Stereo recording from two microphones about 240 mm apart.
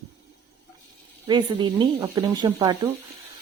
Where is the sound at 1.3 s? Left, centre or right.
Centre.